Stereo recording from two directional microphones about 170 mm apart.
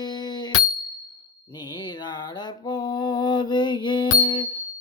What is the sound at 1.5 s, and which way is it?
Mantra, 25° left (ahead or behind).